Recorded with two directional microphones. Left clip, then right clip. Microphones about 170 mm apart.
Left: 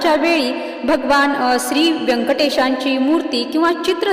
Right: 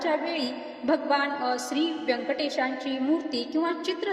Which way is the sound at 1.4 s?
50° left (ahead or behind).